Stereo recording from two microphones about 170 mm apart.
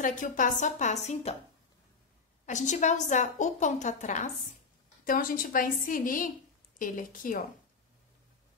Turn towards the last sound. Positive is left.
turn(degrees=50)  # may be behind; listen again after turning